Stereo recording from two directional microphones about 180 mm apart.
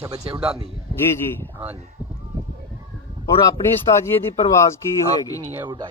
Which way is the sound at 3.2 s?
20° left (ahead or behind).